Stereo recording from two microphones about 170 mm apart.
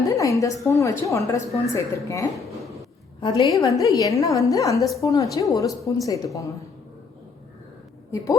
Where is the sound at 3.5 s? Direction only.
20° left (ahead or behind).